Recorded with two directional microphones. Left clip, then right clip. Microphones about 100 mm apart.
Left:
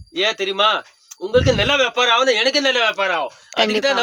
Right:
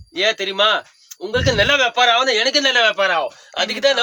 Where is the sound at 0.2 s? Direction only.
Centre (ahead or behind).